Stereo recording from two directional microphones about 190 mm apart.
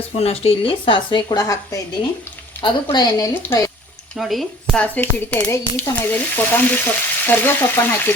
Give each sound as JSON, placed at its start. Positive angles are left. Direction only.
{"t": 0.2, "sound": "a woman's voice", "side_deg": 30}
{"t": 4.2, "sound": "a woman's voice", "side_deg": 0}